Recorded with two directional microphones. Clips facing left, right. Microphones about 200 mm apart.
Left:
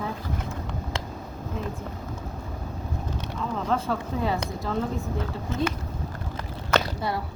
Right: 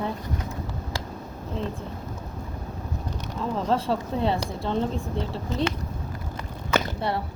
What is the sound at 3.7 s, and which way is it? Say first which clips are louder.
Speech: right 2 dB; 30° right (ahead or behind).